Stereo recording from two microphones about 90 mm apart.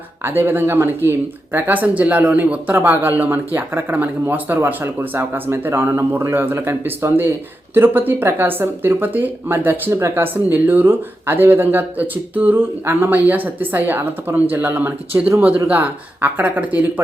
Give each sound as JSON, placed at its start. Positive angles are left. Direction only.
{"t": 0.3, "sound": "speech", "side_deg": -25}